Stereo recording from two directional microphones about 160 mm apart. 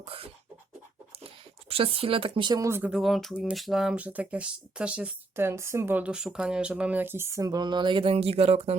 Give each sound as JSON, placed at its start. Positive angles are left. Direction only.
{"t": 0.0, "sound": "a sound", "side_deg": -35}
{"t": 1.7, "sound": "speech", "side_deg": -35}
{"t": 2.9, "sound": "speech", "side_deg": 0}